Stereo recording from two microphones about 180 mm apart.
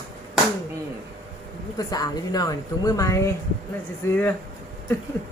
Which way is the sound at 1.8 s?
20° left (ahead or behind).